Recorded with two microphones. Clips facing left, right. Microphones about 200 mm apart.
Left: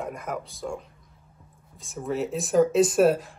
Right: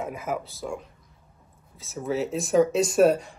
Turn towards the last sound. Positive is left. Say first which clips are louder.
# right 1 dB
turn(degrees=0)  # may be behind; listen again after turning